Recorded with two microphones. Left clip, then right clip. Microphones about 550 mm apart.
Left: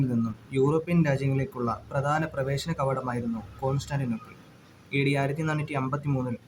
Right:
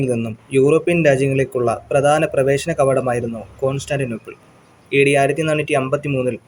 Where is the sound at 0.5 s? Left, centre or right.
Left.